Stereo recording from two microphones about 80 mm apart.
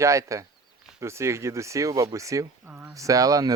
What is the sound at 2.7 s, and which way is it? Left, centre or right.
Speech, right.